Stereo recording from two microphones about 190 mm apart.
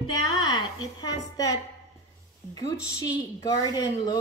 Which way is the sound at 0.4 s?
20° left (ahead or behind).